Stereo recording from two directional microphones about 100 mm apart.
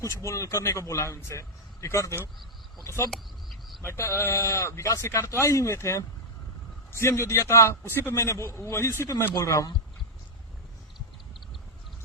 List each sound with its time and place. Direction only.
0.0 s speech: 30° left (ahead or behind)